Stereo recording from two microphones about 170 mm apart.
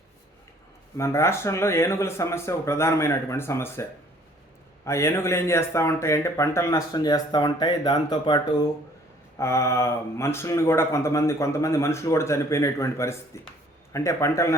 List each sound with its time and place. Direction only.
0.9 s speech: 15° left (ahead or behind)
4.9 s speech: 15° left (ahead or behind)
9.4 s speech: 15° left (ahead or behind)